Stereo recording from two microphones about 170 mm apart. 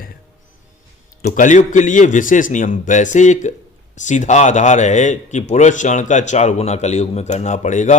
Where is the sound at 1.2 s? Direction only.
45° left (ahead or behind).